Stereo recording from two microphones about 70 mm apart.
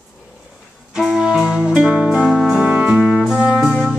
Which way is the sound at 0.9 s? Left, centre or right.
Centre.